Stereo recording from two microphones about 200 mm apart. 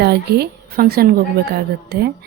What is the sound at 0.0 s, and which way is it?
A woman's voice, 55° right (ahead or behind).